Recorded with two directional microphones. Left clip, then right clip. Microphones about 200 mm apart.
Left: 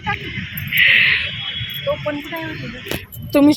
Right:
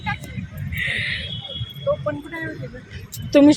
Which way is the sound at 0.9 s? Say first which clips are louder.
Left 11 dB; 5° right (ahead or behind).